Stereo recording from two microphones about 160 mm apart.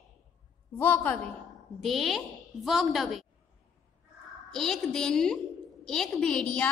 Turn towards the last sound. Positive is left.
turn(degrees=5)  # may be behind; listen again after turning